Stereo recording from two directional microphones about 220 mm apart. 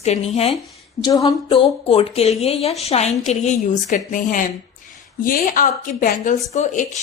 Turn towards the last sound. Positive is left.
turn(degrees=35)  # may be behind; listen again after turning